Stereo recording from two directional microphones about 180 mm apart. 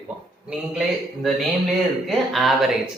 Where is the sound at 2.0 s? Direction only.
Centre (ahead or behind).